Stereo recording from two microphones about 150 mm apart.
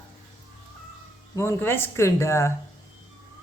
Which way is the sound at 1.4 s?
15° left (ahead or behind).